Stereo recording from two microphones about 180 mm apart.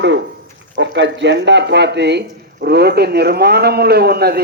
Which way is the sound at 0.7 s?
80° right.